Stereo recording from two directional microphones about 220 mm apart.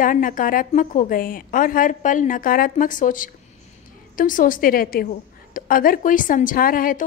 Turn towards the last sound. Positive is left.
turn(degrees=40)  # may be behind; listen again after turning